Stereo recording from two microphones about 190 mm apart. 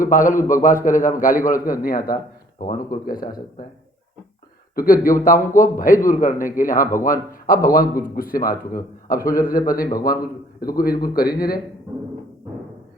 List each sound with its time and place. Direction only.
0.0 s a man's voice: 45° left (ahead or behind)
4.7 s a man's voice: 50° left (ahead or behind)